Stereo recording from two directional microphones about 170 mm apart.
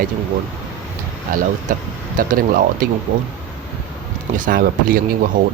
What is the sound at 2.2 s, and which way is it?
Speech, 55° right (ahead or behind).